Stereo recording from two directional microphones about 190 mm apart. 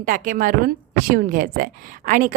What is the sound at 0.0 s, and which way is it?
A woman's voice, 45° right (ahead or behind).